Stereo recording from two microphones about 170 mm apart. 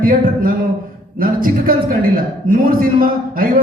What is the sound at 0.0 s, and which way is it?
A man's voice, 55° right (ahead or behind).